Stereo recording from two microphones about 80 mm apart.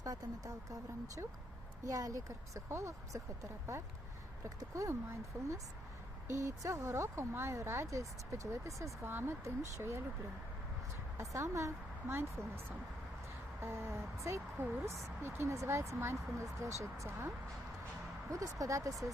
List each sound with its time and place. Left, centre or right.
0.0 s speech: right
4.4 s speech: right
5.3 s speech: right
9.0 s speech: right
11.2 s a woman's voice: right
13.6 s speech: right